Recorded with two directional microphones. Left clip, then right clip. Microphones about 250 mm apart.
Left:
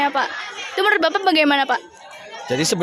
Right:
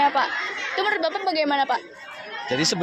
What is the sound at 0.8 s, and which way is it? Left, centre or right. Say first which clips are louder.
A woman's voice: left 7 dB; left.